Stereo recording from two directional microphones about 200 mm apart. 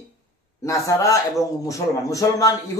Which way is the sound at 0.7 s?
15° left (ahead or behind).